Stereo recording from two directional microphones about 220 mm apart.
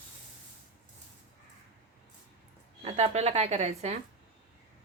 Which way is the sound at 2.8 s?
30° right (ahead or behind).